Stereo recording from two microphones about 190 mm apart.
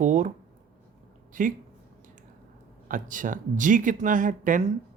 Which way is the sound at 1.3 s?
45° right (ahead or behind).